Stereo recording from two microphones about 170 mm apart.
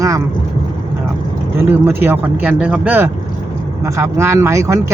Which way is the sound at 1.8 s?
15° right (ahead or behind).